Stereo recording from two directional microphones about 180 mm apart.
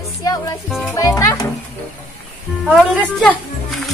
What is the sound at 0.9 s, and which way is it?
Speech, 20° left (ahead or behind).